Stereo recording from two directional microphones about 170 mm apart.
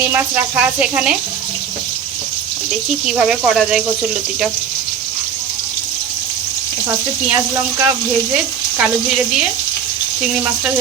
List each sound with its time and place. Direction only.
0.1 s speech: 10° right (ahead or behind)
3.1 s speech: 5° right (ahead or behind)
7.3 s speech: 15° right (ahead or behind)
8.8 s speech: 5° right (ahead or behind)